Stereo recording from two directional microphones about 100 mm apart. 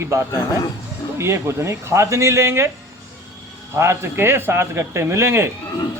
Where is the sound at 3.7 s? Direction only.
30° right (ahead or behind).